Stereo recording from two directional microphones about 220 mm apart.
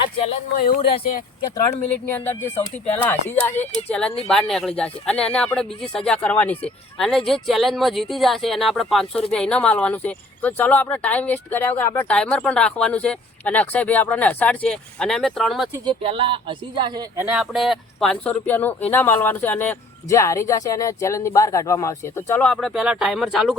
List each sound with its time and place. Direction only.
0.5 s speech: 40° left (ahead or behind)
0.8 s speech: 25° left (ahead or behind)
2.0 s speech: 10° left (ahead or behind)
15.9 s speech: 25° right (ahead or behind)
17.2 s speech: centre (ahead or behind)